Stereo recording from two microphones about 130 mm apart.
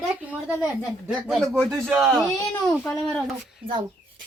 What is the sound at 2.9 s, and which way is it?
Speech, 15° left (ahead or behind).